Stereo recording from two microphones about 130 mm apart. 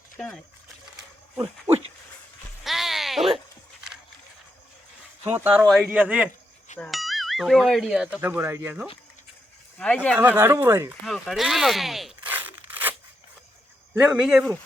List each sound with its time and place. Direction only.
0.2 s speech: 5° left (ahead or behind)
2.6 s music: centre (ahead or behind)
5.3 s speech: 15° right (ahead or behind)
6.7 s speech: 5° left (ahead or behind)
9.7 s speech: 10° left (ahead or behind)
10.2 s speech: 15° right (ahead or behind)
11.0 s speech: centre (ahead or behind)
12.3 s a sound: 15° right (ahead or behind)
13.9 s speech: 10° right (ahead or behind)